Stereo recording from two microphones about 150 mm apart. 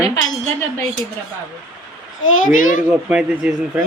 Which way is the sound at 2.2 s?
60° left (ahead or behind).